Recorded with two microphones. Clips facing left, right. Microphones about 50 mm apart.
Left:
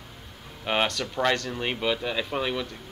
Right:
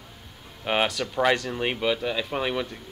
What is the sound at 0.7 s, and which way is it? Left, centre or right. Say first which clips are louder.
Speech: right 1 dB; centre.